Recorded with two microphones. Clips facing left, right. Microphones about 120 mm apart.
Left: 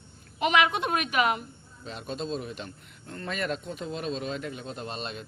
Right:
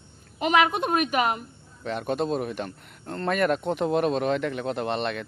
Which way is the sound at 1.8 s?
60° right (ahead or behind).